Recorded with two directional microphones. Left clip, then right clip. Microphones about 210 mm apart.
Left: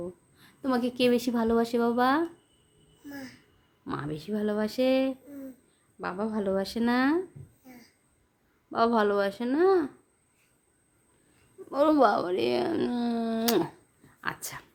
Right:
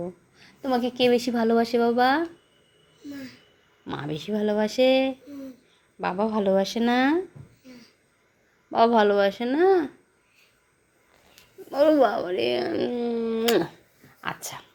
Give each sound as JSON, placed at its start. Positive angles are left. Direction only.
{"t": 0.3, "sound": "a woman's voice", "side_deg": 15}
{"t": 3.8, "sound": "speech", "side_deg": 5}
{"t": 8.7, "sound": "speech", "side_deg": 0}
{"t": 12.1, "sound": "speech", "side_deg": 15}
{"t": 14.2, "sound": "whispering", "side_deg": 5}